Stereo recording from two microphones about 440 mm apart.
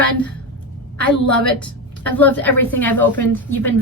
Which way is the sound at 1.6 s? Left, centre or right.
Centre.